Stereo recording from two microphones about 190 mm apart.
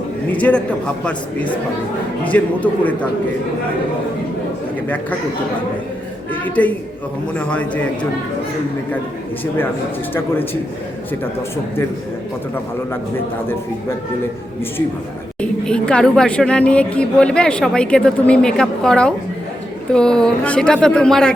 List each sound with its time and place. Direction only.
0.3 s a man's voice: 5° left (ahead or behind)
2.2 s a man's voice: 5° left (ahead or behind)
6.3 s a woman's voice: 10° left (ahead or behind)
10.2 s a man's voice: 10° left (ahead or behind)
15.4 s a woman's voice: 5° left (ahead or behind)